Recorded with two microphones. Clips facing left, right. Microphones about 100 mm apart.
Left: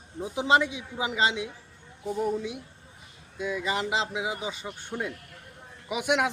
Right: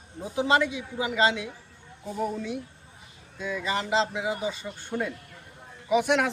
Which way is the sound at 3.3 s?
15° left (ahead or behind).